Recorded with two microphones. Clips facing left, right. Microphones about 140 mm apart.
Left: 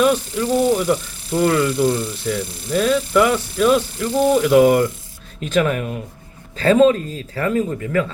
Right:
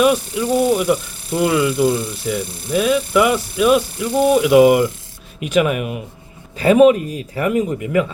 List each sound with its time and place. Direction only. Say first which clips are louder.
0.0 s speech: right 1 dB; 10° right (ahead or behind)